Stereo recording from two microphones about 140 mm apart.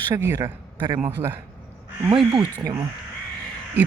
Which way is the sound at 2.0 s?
35° right (ahead or behind).